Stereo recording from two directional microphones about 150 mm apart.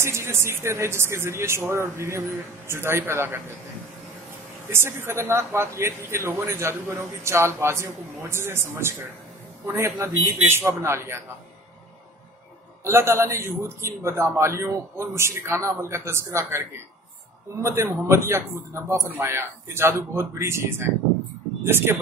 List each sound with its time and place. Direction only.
0.0 s a man's voice: 15° right (ahead or behind)
4.6 s a man's voice: 15° right (ahead or behind)
12.8 s a man's voice: 15° right (ahead or behind)
21.6 s a man's voice: 15° right (ahead or behind)